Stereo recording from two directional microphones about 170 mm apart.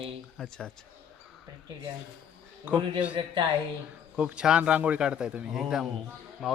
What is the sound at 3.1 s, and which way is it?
Speech, 30° right (ahead or behind).